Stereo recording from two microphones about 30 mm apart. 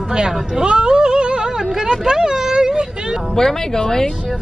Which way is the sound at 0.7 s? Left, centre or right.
Right.